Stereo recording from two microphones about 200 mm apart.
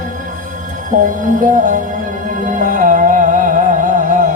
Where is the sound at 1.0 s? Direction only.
40° right (ahead or behind).